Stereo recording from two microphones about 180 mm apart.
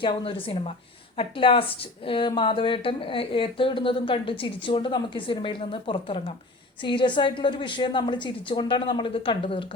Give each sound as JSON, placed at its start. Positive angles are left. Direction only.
{"t": 0.0, "sound": "a woman's voice", "side_deg": 30}